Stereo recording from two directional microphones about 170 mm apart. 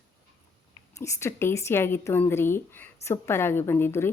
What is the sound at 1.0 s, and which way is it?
A woman's voice, 15° left (ahead or behind).